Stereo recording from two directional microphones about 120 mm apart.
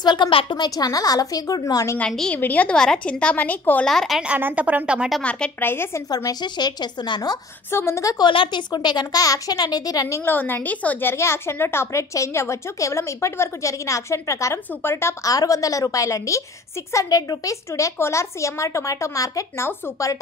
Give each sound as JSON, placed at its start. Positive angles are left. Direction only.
{"t": 0.0, "sound": "a woman's voice", "side_deg": 40}
{"t": 0.7, "sound": "a woman's voice", "side_deg": 30}
{"t": 2.0, "sound": "a woman's voice", "side_deg": 5}
{"t": 3.8, "sound": "speech", "side_deg": 5}
{"t": 4.2, "sound": "speech", "side_deg": -15}
{"t": 5.2, "sound": "a woman's voice", "side_deg": 15}
{"t": 6.0, "sound": "a woman's voice", "side_deg": 30}
{"t": 7.7, "sound": "speech", "side_deg": 25}
{"t": 8.3, "sound": "speech", "side_deg": 40}